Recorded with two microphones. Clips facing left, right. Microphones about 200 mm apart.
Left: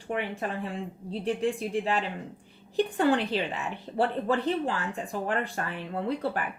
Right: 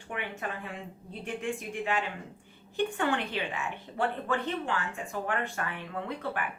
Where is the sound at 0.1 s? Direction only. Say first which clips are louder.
Left 5 dB; 35° left (ahead or behind).